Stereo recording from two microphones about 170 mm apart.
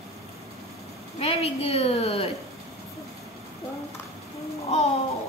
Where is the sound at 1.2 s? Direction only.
35° left (ahead or behind).